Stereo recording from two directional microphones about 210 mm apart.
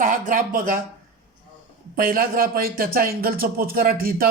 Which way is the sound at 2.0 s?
45° right (ahead or behind).